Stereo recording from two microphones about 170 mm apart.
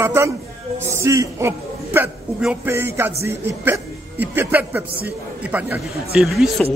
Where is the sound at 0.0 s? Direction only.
15° right (ahead or behind).